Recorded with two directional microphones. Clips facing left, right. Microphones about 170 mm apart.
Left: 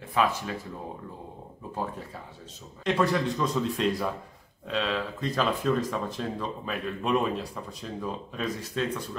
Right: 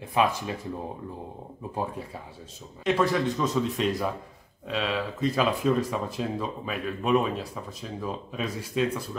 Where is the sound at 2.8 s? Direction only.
Centre (ahead or behind).